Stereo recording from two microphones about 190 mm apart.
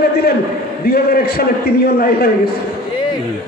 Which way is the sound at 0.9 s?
55° left (ahead or behind).